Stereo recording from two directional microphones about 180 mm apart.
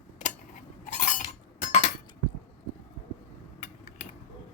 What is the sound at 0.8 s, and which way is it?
Chink, 45° left (ahead or behind).